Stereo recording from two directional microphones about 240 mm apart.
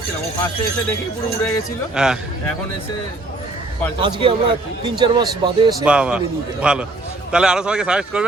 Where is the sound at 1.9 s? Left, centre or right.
Centre.